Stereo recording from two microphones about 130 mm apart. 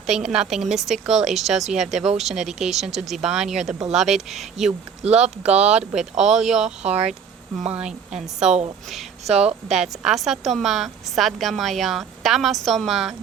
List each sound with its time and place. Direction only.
0.1 s a woman's voice: 5° right (ahead or behind)
5.0 s speech: 60° right (ahead or behind)
5.9 s a woman's voice: 5° right (ahead or behind)
6.8 s speech: 55° right (ahead or behind)
7.7 s a woman's voice: 5° right (ahead or behind)
8.4 s speech: 60° right (ahead or behind)
9.5 s a woman's voice: 5° right (ahead or behind)